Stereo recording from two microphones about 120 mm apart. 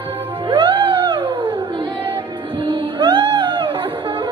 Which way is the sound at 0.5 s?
45° right (ahead or behind).